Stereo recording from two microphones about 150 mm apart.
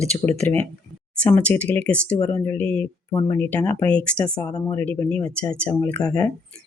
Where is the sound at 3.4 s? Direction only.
10° left (ahead or behind).